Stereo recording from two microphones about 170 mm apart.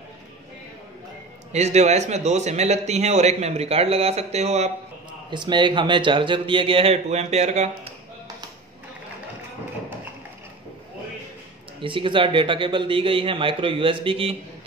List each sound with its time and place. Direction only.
1.5 s a man's voice: 40° right (ahead or behind)
5.3 s speech: 25° right (ahead or behind)
11.8 s a man's voice: 30° right (ahead or behind)